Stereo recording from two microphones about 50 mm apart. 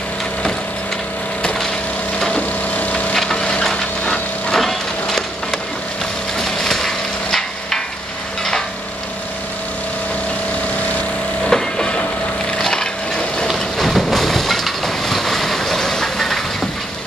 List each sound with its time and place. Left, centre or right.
2.3 s wood: left
3.2 s wood: centre
4.5 s splinter: centre
6.3 s wood: centre
11.4 s vehicle: centre
12.5 s wood: centre
13.5 s crushing: centre